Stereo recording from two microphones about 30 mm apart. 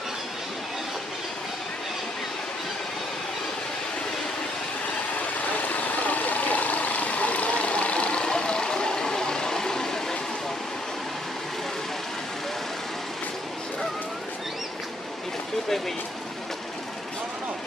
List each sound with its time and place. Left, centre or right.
5.6 s vehicle: left
8.2 s vehicle: left